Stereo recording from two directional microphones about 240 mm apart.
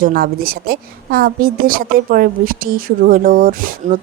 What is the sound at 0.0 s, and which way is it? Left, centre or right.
A woman's voice, right.